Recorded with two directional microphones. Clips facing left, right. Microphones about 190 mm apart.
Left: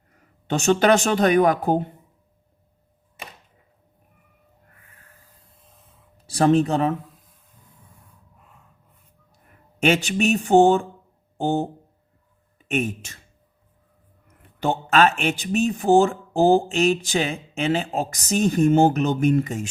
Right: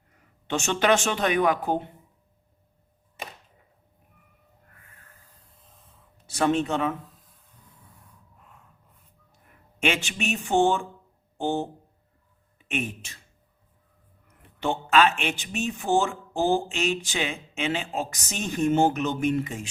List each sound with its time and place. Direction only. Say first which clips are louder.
0.4 s speech: left 5 dB; 40° left (ahead or behind)
6.2 s speech: left 6 dB; 35° left (ahead or behind)
9.8 s speech: left 7 dB; 40° left (ahead or behind)
14.6 s speech: left 3 dB; 45° left (ahead or behind)